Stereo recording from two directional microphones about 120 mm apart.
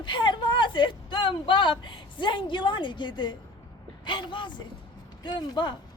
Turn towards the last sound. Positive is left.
turn(degrees=40)  # may be behind; listen again after turning